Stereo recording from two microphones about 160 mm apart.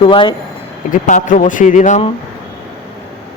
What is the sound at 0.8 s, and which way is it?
A man's voice, 55° left (ahead or behind).